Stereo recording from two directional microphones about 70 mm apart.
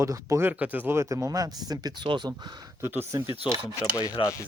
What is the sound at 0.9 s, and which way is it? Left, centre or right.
Speech, right.